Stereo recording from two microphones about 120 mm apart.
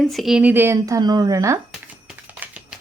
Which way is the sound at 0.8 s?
30° right (ahead or behind).